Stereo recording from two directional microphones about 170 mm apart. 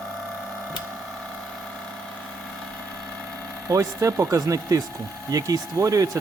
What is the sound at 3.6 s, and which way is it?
Speech, 20° right (ahead or behind).